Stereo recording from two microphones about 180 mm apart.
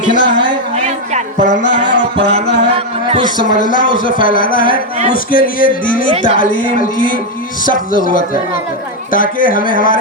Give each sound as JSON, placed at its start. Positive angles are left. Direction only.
{"t": 0.0, "sound": "speech", "side_deg": 45}
{"t": 0.9, "sound": "music", "side_deg": -40}
{"t": 1.6, "sound": "music", "side_deg": 45}
{"t": 3.2, "sound": "speech", "side_deg": 45}